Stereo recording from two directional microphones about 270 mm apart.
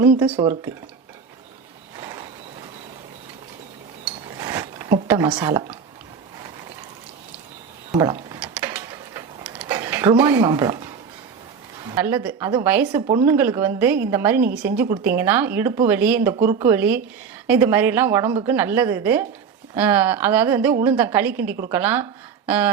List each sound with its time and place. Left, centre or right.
0.2 s speech: centre
2.0 s a sound: centre
4.4 s zipper: centre
7.9 s mechanisms: centre
11.9 s speech: centre